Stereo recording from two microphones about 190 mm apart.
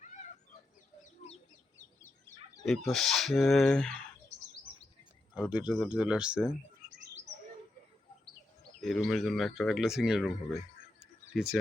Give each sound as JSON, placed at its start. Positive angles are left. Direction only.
{"t": 1.2, "sound": "chicken", "side_deg": 35}
{"t": 2.6, "sound": "speech", "side_deg": 0}
{"t": 5.5, "sound": "speech", "side_deg": -5}
{"t": 8.8, "sound": "speech", "side_deg": 0}